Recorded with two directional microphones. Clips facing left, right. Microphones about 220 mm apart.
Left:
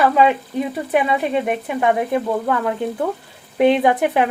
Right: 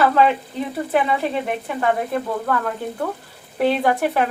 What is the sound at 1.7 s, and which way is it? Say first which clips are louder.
Speech: left 3 dB; 15° left (ahead or behind).